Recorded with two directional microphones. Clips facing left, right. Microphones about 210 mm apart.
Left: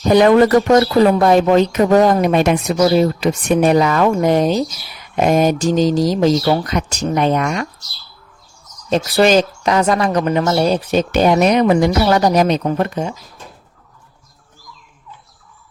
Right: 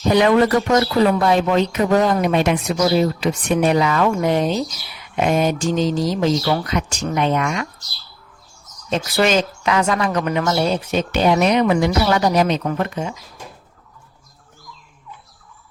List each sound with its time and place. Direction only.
0.1 s speech: 45° left (ahead or behind)
8.9 s speech: 35° left (ahead or behind)